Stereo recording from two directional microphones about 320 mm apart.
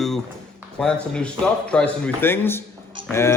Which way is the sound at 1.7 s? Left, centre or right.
Centre.